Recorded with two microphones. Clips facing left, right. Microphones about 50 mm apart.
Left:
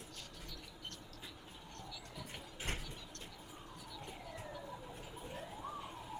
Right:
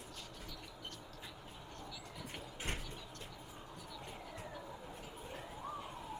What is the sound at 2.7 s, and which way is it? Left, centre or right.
Music, centre.